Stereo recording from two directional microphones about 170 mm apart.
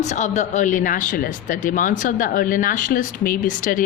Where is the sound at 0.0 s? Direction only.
45° left (ahead or behind).